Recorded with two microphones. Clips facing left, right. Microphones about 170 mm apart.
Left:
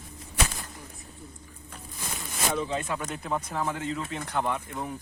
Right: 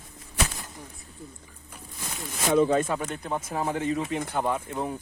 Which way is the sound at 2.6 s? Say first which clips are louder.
Right 9 dB; 45° right (ahead or behind).